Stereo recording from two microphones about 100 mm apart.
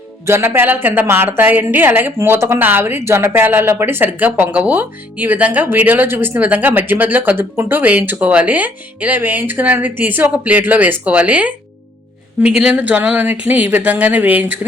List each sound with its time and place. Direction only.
0.3 s a woman's voice: 25° right (ahead or behind)